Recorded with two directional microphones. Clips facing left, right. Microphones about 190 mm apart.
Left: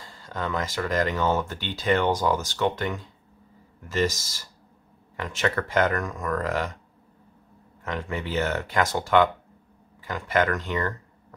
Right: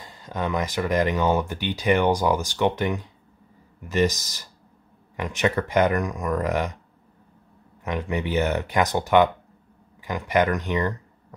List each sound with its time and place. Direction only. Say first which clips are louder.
0.0 s speech: right 3 dB; 20° right (ahead or behind)
7.8 s speech: right 4 dB; 15° right (ahead or behind)